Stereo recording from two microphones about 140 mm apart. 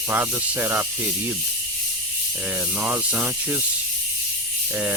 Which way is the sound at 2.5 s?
10° right (ahead or behind).